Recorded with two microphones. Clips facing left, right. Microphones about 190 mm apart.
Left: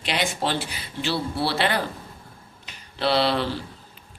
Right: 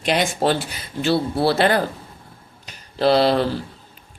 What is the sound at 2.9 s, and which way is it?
Speech, 40° right (ahead or behind).